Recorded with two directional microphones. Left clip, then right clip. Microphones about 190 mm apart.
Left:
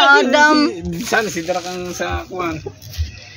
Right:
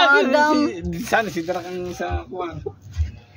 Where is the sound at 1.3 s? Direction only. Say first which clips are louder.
Left 4 dB; 45° left (ahead or behind).